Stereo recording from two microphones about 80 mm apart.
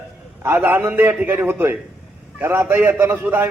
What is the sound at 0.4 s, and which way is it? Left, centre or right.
A man's voice, right.